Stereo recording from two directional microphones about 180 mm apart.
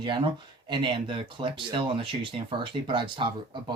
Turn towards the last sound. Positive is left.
turn(degrees=-25)  # may be behind; listen again after turning